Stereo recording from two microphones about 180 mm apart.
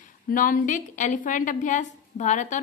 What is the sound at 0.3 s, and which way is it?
A woman's voice, 50° left (ahead or behind).